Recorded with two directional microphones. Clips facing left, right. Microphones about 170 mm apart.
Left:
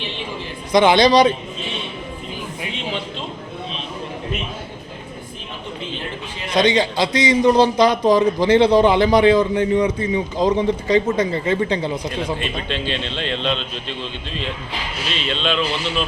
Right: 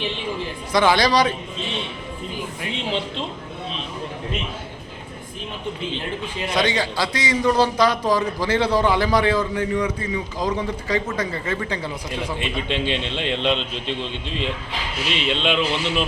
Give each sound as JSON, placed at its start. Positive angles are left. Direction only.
{"t": 0.7, "sound": "a man's voice", "side_deg": 20}
{"t": 6.5, "sound": "a man's voice", "side_deg": 20}
{"t": 12.4, "sound": "a man's voice", "side_deg": -20}